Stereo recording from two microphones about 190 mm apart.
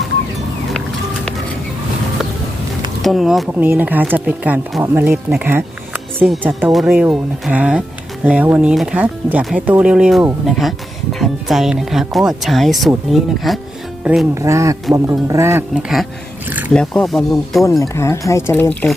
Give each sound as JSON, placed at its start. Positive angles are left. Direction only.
{"t": 3.0, "sound": "speech", "side_deg": 0}
{"t": 14.4, "sound": "speech", "side_deg": -15}
{"t": 15.7, "sound": "speech", "side_deg": 0}
{"t": 17.7, "sound": "speech", "side_deg": 15}